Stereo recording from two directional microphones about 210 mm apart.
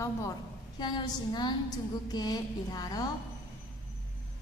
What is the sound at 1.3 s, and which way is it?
A woman's voice, 20° left (ahead or behind).